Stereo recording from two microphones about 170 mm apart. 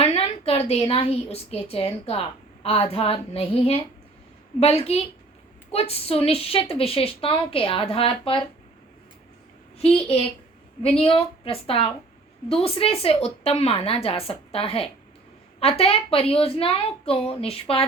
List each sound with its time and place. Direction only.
0.0 s a woman's voice: 35° left (ahead or behind)
9.7 s a woman's voice: 35° left (ahead or behind)